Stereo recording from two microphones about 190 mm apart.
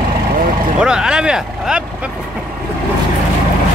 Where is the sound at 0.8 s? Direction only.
5° right (ahead or behind).